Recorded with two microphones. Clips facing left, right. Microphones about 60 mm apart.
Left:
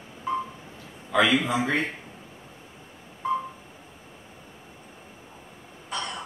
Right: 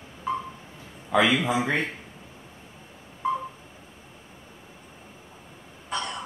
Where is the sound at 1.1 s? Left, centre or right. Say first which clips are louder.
Even; centre.